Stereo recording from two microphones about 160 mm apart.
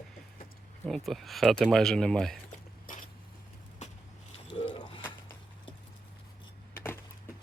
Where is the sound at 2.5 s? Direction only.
55° left (ahead or behind).